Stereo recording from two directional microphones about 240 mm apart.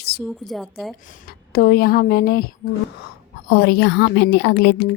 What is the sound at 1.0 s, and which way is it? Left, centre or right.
A woman's voice, left.